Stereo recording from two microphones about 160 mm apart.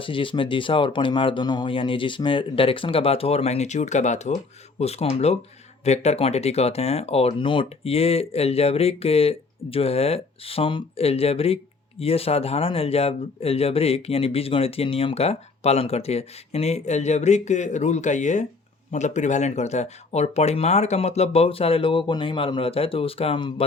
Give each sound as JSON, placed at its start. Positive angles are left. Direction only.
{"t": 0.0, "sound": "speech", "side_deg": 30}